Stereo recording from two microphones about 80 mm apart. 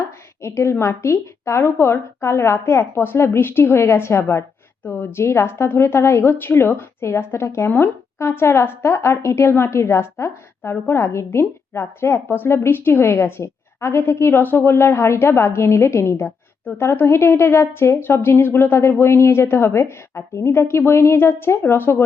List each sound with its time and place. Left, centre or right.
0.4 s a woman's voice: left